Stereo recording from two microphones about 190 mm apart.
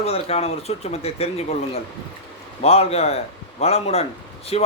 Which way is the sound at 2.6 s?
30° left (ahead or behind).